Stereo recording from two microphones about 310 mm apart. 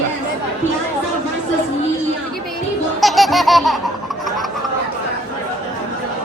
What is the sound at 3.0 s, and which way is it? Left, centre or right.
Laughter, centre.